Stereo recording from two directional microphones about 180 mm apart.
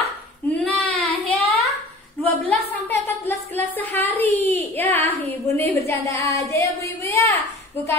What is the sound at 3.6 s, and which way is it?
Speech, 10° left (ahead or behind).